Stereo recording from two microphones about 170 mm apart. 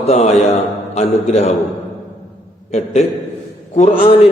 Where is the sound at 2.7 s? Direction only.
40° left (ahead or behind).